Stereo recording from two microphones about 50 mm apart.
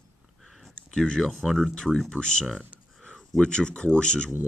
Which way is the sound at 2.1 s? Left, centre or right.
Centre.